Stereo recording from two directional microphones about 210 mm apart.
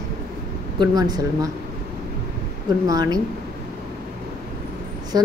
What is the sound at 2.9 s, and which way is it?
Speech, 20° right (ahead or behind).